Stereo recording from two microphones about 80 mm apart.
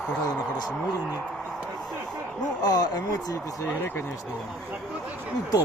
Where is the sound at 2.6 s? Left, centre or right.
Left.